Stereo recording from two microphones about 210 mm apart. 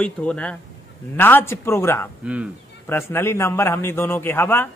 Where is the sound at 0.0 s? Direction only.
5° left (ahead or behind).